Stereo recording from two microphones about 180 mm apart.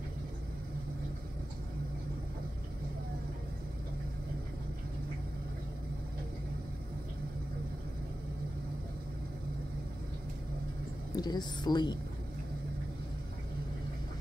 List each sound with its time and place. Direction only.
11.1 s speech: 20° left (ahead or behind)